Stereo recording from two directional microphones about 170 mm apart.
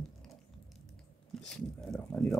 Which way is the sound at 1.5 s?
5° left (ahead or behind).